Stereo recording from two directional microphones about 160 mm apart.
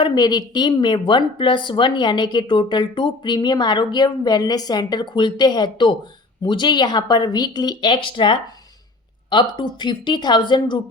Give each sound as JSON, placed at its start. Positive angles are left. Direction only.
{"t": 0.0, "sound": "a woman's voice", "side_deg": 25}